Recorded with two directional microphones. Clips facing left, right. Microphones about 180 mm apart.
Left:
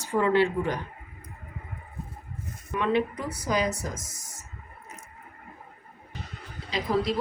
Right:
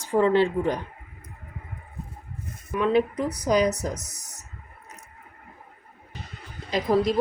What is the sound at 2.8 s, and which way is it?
Speech, 35° right (ahead or behind).